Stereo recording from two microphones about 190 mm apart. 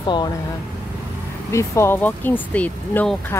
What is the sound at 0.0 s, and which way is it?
Speech, 25° left (ahead or behind).